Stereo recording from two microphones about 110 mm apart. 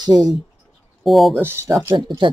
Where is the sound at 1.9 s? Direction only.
45° right (ahead or behind).